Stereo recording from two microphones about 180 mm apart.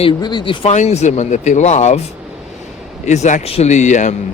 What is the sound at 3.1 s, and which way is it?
Speech, 40° left (ahead or behind).